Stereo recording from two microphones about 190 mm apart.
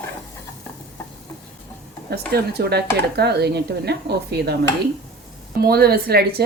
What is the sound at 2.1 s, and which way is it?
Speech, 55° right (ahead or behind).